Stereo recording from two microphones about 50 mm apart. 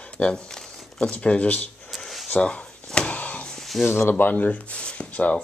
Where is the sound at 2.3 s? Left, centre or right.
Left.